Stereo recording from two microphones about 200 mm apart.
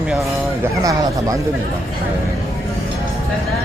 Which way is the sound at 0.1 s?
5° right (ahead or behind).